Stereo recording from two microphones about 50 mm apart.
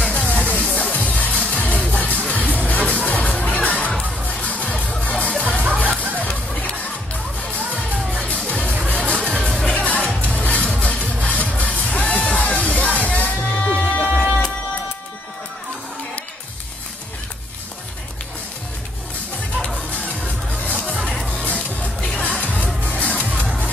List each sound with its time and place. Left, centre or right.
0.0 s music: left
8.1 s music: left
9.8 s music: left
20.2 s music: left